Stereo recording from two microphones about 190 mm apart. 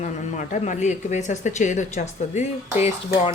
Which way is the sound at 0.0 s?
40° left (ahead or behind).